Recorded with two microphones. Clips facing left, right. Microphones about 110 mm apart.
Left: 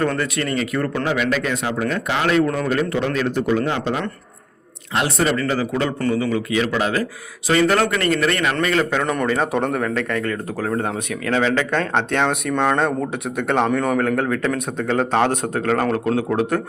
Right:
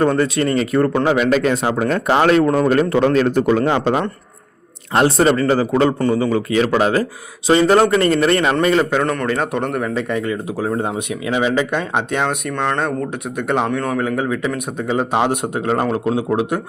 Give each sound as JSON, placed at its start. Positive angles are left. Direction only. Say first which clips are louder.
{"t": 0.2, "sound": "speech", "louder": "right 5 dB", "side_deg": -30}
{"t": 8.8, "sound": "speech", "louder": "right 2 dB", "side_deg": -10}
{"t": 9.9, "sound": "speech", "louder": "right 2 dB", "side_deg": -15}